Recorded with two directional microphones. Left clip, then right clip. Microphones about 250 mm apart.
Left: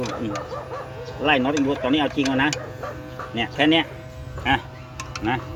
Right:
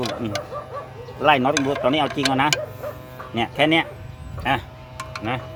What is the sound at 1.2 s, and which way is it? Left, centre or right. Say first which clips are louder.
Speech: right 3 dB; right.